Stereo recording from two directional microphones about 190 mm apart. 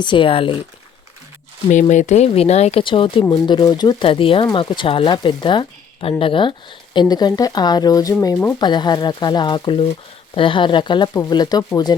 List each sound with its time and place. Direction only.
0.0 s speech: 25° left (ahead or behind)
1.9 s speech: 40° left (ahead or behind); by 11.9 s 20° left (ahead or behind)